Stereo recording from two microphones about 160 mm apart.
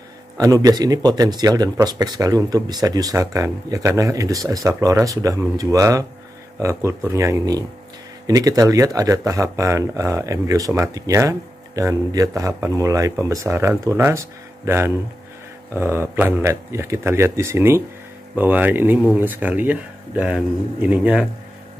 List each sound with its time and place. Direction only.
0.4 s speech: 20° right (ahead or behind)